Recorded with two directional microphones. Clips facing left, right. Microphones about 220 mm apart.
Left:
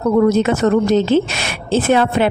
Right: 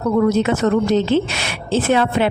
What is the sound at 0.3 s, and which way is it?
A woman's voice, 45° left (ahead or behind).